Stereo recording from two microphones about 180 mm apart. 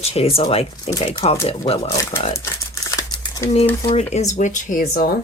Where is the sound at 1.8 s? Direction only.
15° left (ahead or behind).